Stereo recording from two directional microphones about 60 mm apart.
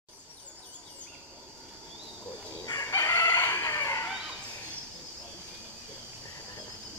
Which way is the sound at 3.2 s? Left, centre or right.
Left.